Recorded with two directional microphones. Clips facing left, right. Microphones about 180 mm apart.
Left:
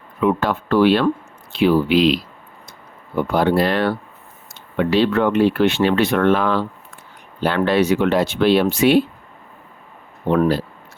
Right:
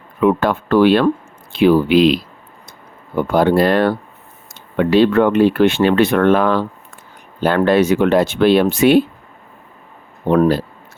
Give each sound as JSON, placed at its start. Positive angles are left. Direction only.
{"t": 0.2, "sound": "speech", "side_deg": -55}
{"t": 3.2, "sound": "speech", "side_deg": -45}
{"t": 10.3, "sound": "speech", "side_deg": -40}